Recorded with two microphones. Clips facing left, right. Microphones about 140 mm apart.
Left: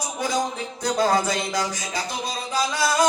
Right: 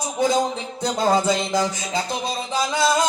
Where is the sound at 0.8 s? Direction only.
25° right (ahead or behind).